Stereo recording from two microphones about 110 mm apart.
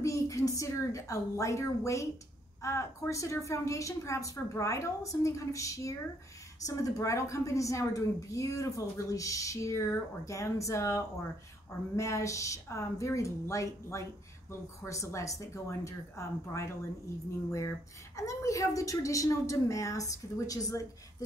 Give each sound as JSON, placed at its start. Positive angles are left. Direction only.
{"t": 0.0, "sound": "a woman's voice", "side_deg": 30}
{"t": 18.1, "sound": "a woman's voice", "side_deg": 30}